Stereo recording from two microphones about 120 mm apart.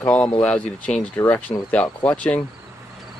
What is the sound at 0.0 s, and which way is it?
Speech, 10° left (ahead or behind).